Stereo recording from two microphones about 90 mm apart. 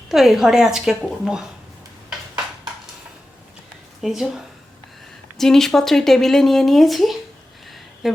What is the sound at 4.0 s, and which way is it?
Speech, centre (ahead or behind).